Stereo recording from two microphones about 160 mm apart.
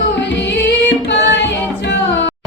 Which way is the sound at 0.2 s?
90° left.